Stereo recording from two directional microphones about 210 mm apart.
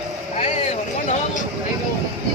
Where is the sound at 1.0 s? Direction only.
35° left (ahead or behind).